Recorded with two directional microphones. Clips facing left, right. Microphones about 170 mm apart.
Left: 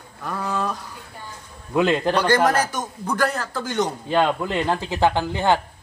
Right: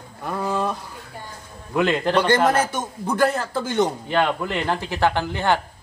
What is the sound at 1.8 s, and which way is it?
Speech, 15° left (ahead or behind).